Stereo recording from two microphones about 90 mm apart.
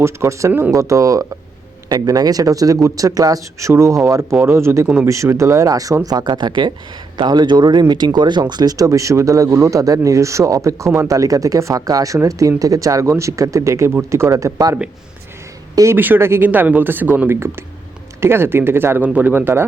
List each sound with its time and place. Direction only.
0.0 s speech: 30° right (ahead or behind)
16.0 s speech: 25° right (ahead or behind)